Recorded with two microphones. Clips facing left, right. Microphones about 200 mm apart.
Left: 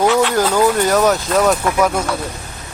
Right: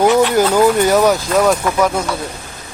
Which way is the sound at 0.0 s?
15° right (ahead or behind).